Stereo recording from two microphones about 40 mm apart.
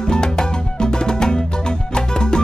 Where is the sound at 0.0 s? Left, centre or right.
Centre.